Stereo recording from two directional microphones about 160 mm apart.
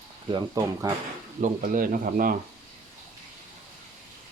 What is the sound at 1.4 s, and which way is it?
Speech, 60° right (ahead or behind).